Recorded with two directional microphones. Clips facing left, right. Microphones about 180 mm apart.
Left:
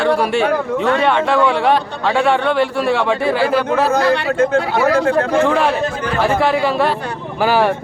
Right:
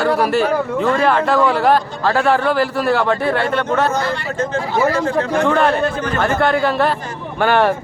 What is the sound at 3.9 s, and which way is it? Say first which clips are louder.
Speech: left 6 dB; 65° left (ahead or behind).